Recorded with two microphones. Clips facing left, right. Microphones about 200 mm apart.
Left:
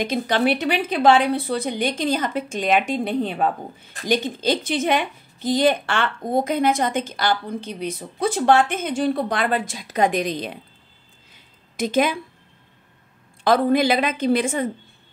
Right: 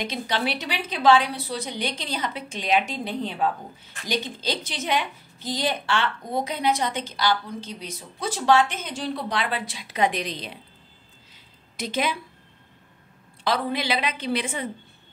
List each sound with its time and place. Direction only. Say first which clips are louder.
0.0 s a woman's voice: left 7 dB; 50° left (ahead or behind)
11.7 s a woman's voice: left 7 dB; 50° left (ahead or behind)
13.4 s a woman's voice: left 9 dB; 50° left (ahead or behind)